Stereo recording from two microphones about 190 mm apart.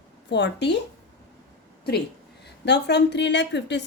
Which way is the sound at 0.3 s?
65° left (ahead or behind).